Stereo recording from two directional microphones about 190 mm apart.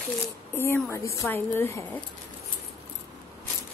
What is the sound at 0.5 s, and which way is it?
Speech, 15° left (ahead or behind).